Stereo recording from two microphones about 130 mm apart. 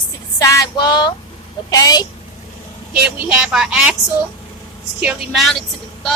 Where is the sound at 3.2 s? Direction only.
5° right (ahead or behind).